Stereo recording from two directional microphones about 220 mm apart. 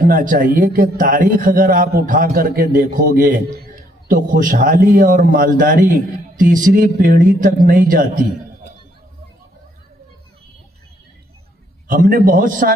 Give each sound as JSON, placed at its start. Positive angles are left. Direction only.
{"t": 0.0, "sound": "a man's voice", "side_deg": -35}
{"t": 11.9, "sound": "a man's voice", "side_deg": -40}